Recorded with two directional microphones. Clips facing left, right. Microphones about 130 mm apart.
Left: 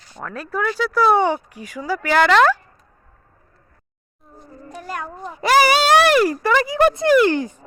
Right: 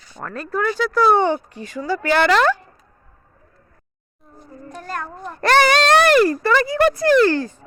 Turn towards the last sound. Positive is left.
turn(degrees=15)  # may be behind; listen again after turning